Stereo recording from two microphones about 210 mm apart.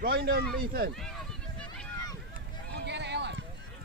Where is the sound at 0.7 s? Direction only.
45° right (ahead or behind).